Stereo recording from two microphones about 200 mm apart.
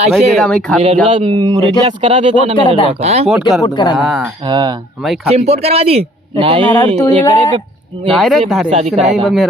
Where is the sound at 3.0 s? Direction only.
30° right (ahead or behind).